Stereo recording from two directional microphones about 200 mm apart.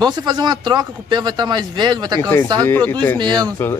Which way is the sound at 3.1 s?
20° right (ahead or behind).